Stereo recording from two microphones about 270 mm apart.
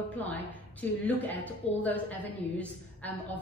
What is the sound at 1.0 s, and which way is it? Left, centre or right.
A woman's voice, centre.